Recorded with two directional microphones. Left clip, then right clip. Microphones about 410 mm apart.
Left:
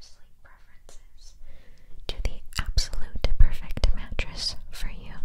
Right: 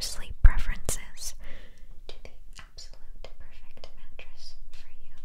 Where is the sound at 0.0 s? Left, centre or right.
Right.